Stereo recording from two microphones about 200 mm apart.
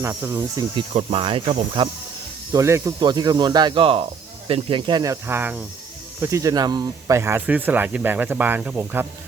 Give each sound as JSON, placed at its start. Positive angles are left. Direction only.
{"t": 0.0, "sound": "speech", "side_deg": -10}
{"t": 0.8, "sound": "speech", "side_deg": -25}